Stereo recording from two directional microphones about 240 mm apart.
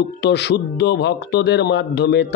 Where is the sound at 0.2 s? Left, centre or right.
Left.